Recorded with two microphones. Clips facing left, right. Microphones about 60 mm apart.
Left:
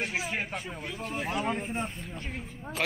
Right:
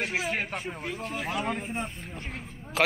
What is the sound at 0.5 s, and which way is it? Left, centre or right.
Speech, right.